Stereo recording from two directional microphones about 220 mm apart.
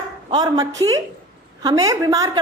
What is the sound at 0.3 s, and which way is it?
A woman's voice, 15° right (ahead or behind).